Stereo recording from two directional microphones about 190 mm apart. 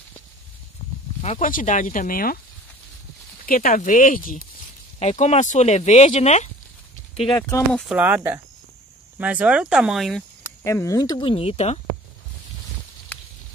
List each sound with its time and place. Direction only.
1.2 s speech: 40° left (ahead or behind)
3.4 s speech: 45° left (ahead or behind)
4.9 s speech: 35° left (ahead or behind)
7.3 s speech: 15° left (ahead or behind)
7.7 s speech: 5° right (ahead or behind)
10.6 s speech: 15° left (ahead or behind); by 11.8 s 35° left (ahead or behind)